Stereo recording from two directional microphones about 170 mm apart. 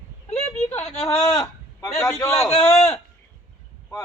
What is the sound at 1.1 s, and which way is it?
A man's voice, 15° left (ahead or behind).